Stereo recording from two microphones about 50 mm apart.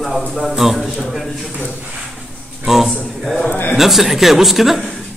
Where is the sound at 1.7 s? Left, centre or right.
Right.